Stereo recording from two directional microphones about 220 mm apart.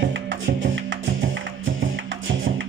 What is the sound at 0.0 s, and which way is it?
Music, 55° right (ahead or behind).